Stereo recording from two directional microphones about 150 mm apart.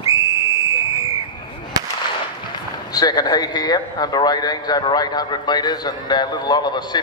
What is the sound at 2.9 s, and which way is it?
A man's voice, 25° left (ahead or behind).